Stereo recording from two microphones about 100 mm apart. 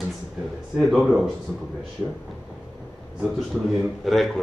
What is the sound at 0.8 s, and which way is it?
Speech, centre (ahead or behind).